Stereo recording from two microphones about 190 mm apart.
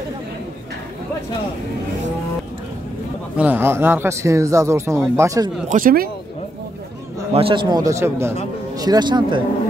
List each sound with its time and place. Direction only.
3.3 s speech: 10° right (ahead or behind)
5.7 s speech: 45° right (ahead or behind)
7.3 s a man's voice: 25° right (ahead or behind)